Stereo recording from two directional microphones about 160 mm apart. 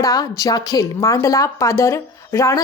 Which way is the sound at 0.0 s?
20° left (ahead or behind).